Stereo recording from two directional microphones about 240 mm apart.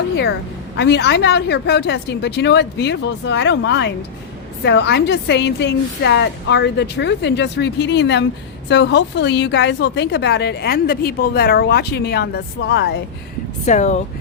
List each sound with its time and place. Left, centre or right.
0.8 s a woman's voice: left
13.7 s speech: left